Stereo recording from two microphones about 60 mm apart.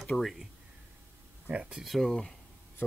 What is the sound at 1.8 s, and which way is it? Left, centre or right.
Speech, centre.